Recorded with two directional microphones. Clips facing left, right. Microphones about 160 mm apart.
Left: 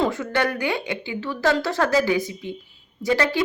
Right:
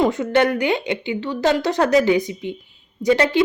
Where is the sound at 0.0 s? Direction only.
20° right (ahead or behind).